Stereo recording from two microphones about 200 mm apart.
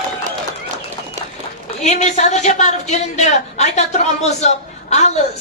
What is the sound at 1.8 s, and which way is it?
A woman's voice, 35° left (ahead or behind).